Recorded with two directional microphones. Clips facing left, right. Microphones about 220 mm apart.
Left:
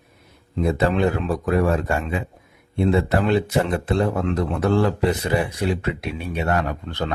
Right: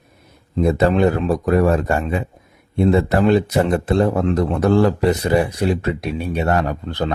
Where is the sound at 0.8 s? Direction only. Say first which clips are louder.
Right 4 dB; 40° right (ahead or behind).